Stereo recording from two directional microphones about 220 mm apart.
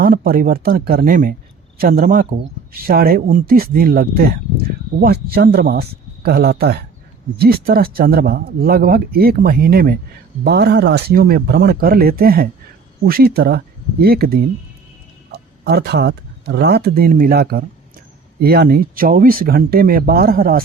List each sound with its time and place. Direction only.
0.0 s speech: 40° right (ahead or behind)